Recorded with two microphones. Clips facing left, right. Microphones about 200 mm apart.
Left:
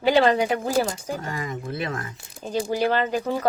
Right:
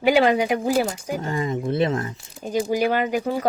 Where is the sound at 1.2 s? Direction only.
30° right (ahead or behind).